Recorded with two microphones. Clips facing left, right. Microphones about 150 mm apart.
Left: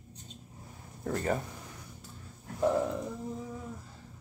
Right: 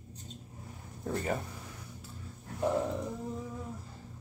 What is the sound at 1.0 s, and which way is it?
Speech, 15° right (ahead or behind).